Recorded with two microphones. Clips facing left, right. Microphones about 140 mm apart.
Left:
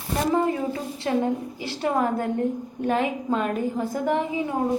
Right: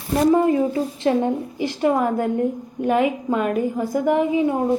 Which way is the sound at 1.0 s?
20° right (ahead or behind).